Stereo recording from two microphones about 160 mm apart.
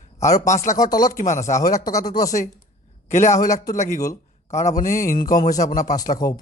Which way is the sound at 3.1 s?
50° left (ahead or behind).